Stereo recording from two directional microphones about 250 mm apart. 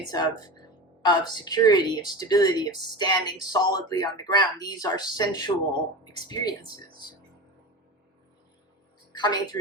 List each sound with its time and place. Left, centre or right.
0.1 s a woman's voice: centre
9.1 s a woman's voice: centre